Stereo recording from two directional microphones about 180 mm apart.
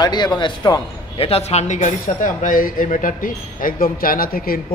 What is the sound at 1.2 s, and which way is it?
Speech, 35° left (ahead or behind).